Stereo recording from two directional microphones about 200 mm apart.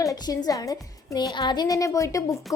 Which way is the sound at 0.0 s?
15° left (ahead or behind).